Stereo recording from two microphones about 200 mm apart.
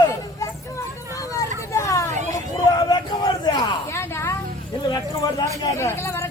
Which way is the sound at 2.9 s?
20° left (ahead or behind).